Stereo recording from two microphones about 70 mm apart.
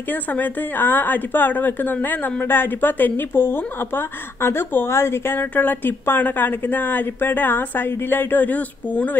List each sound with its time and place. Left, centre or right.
0.1 s a woman's voice: left